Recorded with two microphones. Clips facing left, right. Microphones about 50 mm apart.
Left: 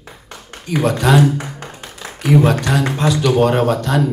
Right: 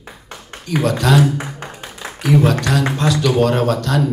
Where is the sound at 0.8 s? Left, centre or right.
Centre.